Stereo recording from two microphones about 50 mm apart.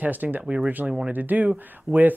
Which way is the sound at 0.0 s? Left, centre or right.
Right.